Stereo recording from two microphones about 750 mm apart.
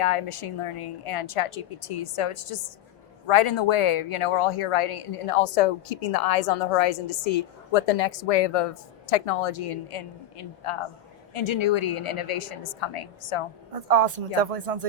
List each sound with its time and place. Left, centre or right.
0.0 s a woman's voice: left
13.8 s speech: right